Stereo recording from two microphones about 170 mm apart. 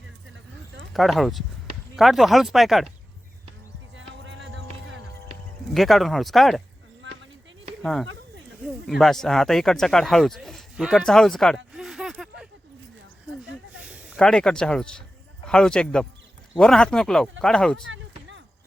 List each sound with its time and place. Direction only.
0.9 s speech: centre (ahead or behind)
3.9 s music: 90° right
5.7 s speech: centre (ahead or behind)
7.8 s speech: centre (ahead or behind)
13.7 s a sound: 5° right (ahead or behind)
14.2 s speech: 5° left (ahead or behind)